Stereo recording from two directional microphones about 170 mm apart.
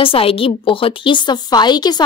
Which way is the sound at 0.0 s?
35° left (ahead or behind).